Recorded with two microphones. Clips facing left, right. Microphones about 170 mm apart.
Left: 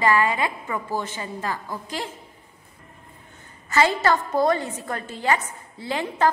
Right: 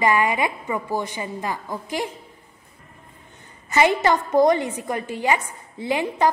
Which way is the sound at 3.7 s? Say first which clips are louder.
Right 2 dB; 15° right (ahead or behind).